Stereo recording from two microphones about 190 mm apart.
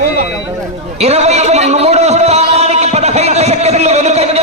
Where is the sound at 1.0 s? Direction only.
35° right (ahead or behind).